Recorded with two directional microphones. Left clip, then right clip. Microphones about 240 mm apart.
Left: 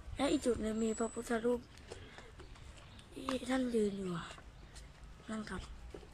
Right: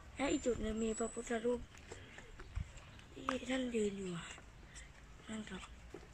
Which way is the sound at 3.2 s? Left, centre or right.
Centre.